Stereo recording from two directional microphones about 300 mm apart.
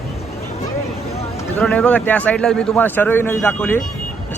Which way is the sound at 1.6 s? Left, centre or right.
Centre.